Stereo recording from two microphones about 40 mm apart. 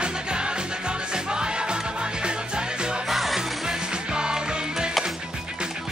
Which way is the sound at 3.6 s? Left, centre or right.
Right.